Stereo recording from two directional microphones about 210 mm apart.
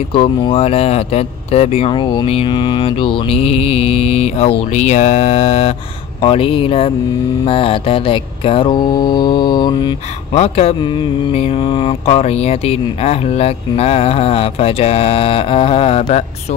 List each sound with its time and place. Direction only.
0.1 s mantra: 25° left (ahead or behind)